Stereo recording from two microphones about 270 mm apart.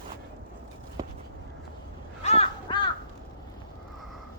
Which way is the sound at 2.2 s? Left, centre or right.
Left.